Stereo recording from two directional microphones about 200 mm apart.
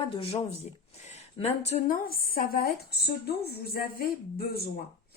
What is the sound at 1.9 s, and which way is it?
A woman's voice, 45° left (ahead or behind).